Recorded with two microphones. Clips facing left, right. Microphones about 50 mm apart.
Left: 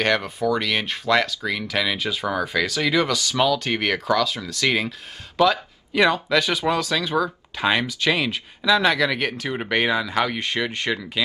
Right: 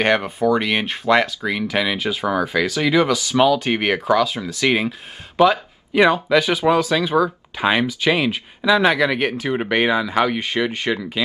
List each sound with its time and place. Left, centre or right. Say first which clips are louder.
0.0 s speech: right 4 dB; right